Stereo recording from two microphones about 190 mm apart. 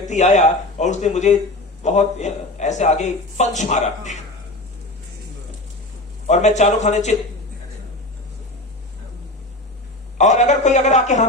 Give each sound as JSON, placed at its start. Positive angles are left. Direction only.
{"t": 0.0, "sound": "a man's voice", "side_deg": 40}
{"t": 6.2, "sound": "a man's voice", "side_deg": 35}
{"t": 10.2, "sound": "a man's voice", "side_deg": 40}